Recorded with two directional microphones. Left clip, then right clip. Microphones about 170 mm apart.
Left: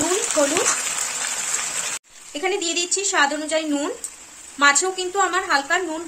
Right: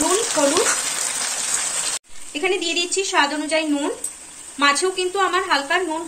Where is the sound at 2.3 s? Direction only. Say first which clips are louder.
Right 2 dB; 40° left (ahead or behind).